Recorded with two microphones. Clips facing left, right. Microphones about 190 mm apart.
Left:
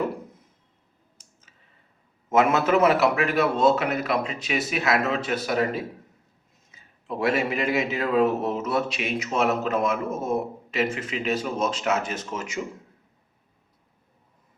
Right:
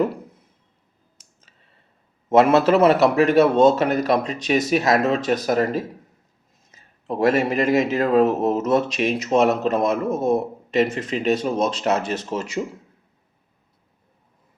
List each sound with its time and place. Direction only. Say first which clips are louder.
2.3 s speech: right 5 dB; 35° right (ahead or behind)